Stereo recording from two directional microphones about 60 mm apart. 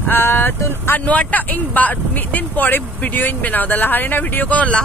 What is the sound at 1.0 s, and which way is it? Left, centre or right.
Speech, left.